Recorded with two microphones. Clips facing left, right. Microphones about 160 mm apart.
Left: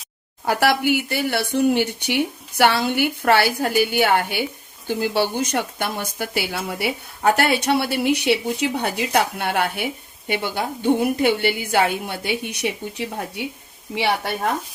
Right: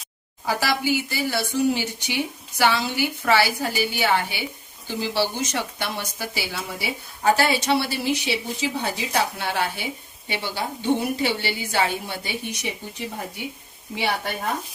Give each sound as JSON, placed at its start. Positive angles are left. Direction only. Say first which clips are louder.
{"t": 0.4, "sound": "speech", "louder": "left 5 dB", "side_deg": 60}
{"t": 13.9, "sound": "a woman's voice", "louder": "left 4 dB", "side_deg": 70}